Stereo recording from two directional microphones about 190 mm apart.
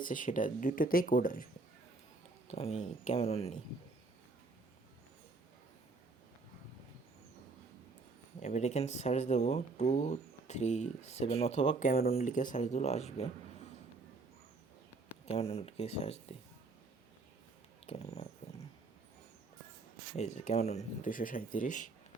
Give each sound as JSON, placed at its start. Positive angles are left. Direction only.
{"t": 0.0, "sound": "speech", "side_deg": 45}
{"t": 2.5, "sound": "speech", "side_deg": 35}
{"t": 8.4, "sound": "speech", "side_deg": 35}
{"t": 15.3, "sound": "speech", "side_deg": 30}
{"t": 17.8, "sound": "speech", "side_deg": 30}
{"t": 20.1, "sound": "speech", "side_deg": 40}